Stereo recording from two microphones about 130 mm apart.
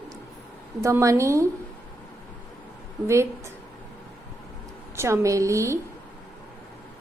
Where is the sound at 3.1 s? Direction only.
20° right (ahead or behind).